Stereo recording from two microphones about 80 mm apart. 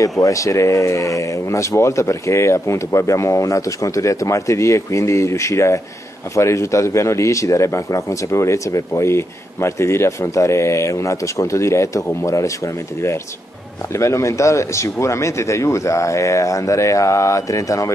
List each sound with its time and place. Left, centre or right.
0.2 s speech: left
13.9 s speech: left